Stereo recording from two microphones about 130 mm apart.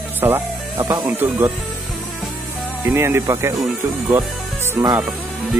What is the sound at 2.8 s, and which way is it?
Music, 20° right (ahead or behind).